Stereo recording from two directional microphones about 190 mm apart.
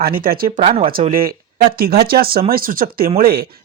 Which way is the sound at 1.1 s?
50° right (ahead or behind).